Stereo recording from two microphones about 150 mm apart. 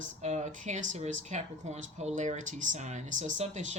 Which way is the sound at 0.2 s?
50° right (ahead or behind).